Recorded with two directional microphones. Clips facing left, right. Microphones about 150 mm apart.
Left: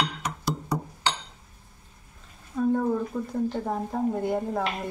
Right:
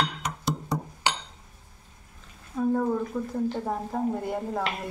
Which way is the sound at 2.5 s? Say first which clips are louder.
Left 1 dB; centre (ahead or behind).